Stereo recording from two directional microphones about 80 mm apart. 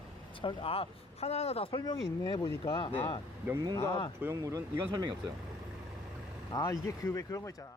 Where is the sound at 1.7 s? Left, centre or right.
Left.